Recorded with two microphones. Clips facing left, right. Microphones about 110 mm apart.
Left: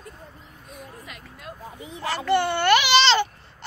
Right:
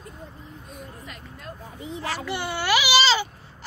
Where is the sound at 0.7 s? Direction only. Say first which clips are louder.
Left 2 dB; centre (ahead or behind).